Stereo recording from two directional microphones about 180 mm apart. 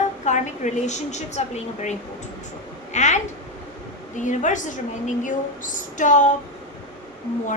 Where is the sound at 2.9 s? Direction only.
40° left (ahead or behind).